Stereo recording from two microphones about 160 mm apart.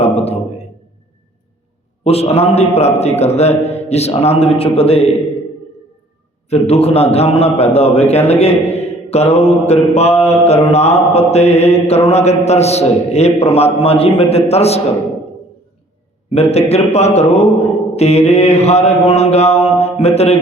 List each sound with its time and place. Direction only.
0.0 s a sound: 40° left (ahead or behind)
2.0 s a man's voice: 40° left (ahead or behind)
6.5 s a man's voice: 40° left (ahead or behind)
16.3 s a man's voice: 40° left (ahead or behind)